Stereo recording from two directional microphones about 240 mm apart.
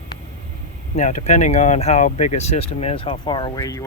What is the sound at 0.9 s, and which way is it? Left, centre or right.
Speech, left.